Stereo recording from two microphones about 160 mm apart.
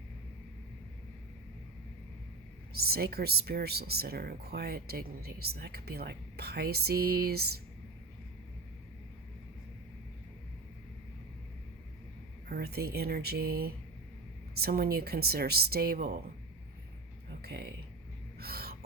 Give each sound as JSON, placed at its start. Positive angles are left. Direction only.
{"t": 2.8, "sound": "speech", "side_deg": -75}
{"t": 12.5, "sound": "speech", "side_deg": -80}
{"t": 17.4, "sound": "speech", "side_deg": -80}
{"t": 18.3, "sound": "a sound", "side_deg": -70}